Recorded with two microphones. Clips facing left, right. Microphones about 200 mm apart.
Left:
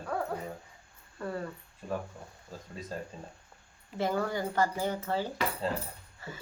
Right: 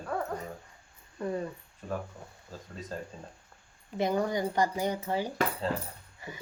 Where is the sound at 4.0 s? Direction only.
15° right (ahead or behind).